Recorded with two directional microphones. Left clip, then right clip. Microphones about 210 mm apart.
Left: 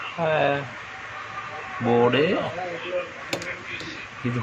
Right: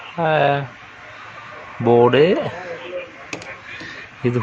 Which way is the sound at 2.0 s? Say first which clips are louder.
Right 7 dB; 50° right (ahead or behind).